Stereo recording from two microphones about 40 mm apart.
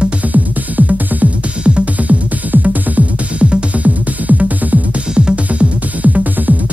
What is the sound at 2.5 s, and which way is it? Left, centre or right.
Music, right.